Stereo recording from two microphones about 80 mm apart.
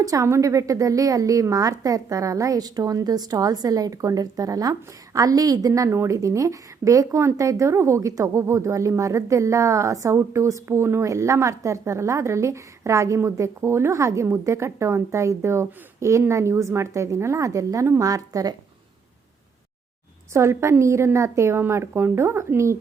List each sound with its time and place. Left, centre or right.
0.0 s a woman's voice: right
20.3 s a woman's voice: right